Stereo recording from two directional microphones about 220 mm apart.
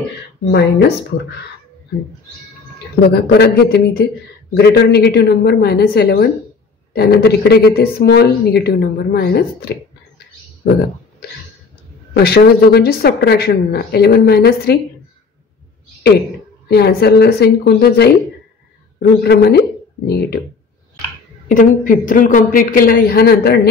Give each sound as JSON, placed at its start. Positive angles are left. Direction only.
{"t": 0.5, "sound": "speech", "side_deg": 50}
{"t": 3.0, "sound": "speech", "side_deg": 45}
{"t": 12.1, "sound": "speech", "side_deg": 45}
{"t": 16.6, "sound": "speech", "side_deg": 45}
{"t": 21.5, "sound": "a woman's voice", "side_deg": 35}